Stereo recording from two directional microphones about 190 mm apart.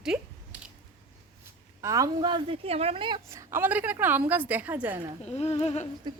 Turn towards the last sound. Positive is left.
turn(degrees=35)  # may be behind; listen again after turning